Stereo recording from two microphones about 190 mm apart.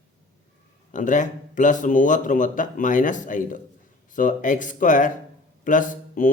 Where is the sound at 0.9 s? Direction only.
40° left (ahead or behind).